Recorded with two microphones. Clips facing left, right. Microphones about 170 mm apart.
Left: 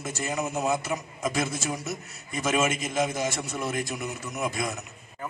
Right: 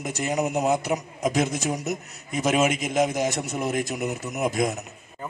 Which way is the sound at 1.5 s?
Centre (ahead or behind).